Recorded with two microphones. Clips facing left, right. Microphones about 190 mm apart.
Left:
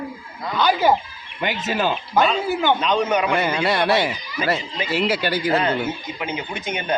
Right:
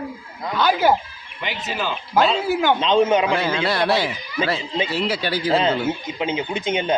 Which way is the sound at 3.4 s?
10° left (ahead or behind).